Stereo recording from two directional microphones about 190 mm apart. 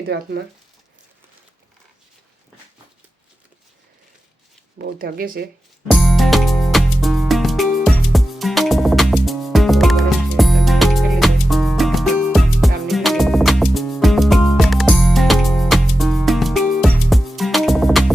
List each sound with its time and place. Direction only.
4.8 s speech: 55° right (ahead or behind)
5.9 s music: centre (ahead or behind)